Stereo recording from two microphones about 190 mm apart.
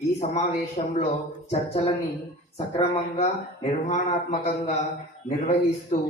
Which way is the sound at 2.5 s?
35° left (ahead or behind).